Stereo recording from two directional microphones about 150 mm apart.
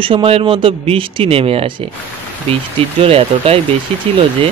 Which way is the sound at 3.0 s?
40° right (ahead or behind).